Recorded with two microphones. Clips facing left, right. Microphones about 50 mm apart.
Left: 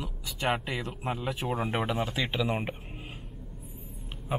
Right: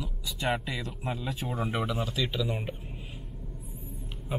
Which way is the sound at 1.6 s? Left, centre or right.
Left.